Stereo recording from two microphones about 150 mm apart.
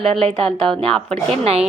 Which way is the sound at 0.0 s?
5° left (ahead or behind).